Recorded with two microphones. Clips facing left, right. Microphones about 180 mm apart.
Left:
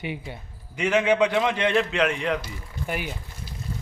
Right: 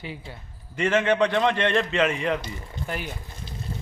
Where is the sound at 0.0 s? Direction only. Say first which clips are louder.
Left 4 dB; 20° left (ahead or behind).